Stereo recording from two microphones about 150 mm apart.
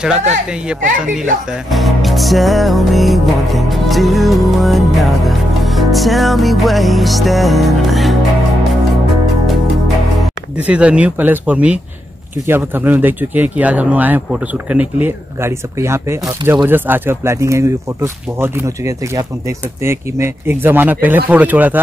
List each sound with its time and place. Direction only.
0.7 s a woman's voice: 5° right (ahead or behind)
1.7 s music: centre (ahead or behind)
10.6 s speech: 10° right (ahead or behind)